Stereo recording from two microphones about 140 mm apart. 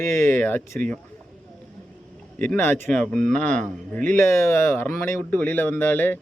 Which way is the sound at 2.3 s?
10° left (ahead or behind).